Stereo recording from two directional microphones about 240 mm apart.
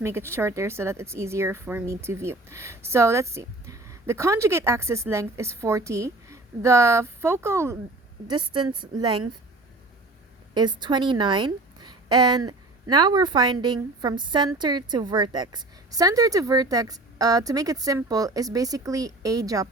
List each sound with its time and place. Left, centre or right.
0.0 s speech: centre
10.5 s a woman's voice: centre